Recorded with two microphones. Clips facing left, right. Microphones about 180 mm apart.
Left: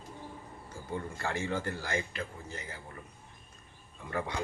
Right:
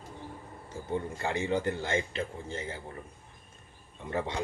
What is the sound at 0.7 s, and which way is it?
A man's voice, 20° right (ahead or behind).